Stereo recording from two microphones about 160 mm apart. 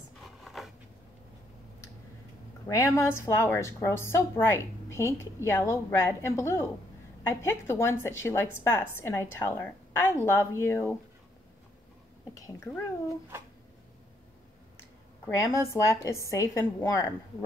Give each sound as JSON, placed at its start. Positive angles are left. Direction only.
{"t": 0.2, "sound": "a sound", "side_deg": 0}
{"t": 2.7, "sound": "a woman's voice", "side_deg": 20}
{"t": 12.4, "sound": "a woman's voice", "side_deg": 15}
{"t": 15.2, "sound": "a woman's voice", "side_deg": 20}